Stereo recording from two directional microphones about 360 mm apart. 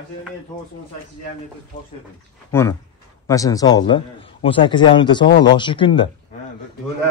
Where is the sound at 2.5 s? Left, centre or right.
Centre.